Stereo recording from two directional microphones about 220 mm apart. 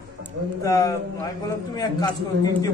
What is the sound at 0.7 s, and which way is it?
A woman's voice, 15° left (ahead or behind).